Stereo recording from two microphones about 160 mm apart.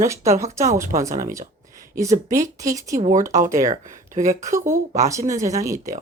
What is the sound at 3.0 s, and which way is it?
Speech, 55° right (ahead or behind).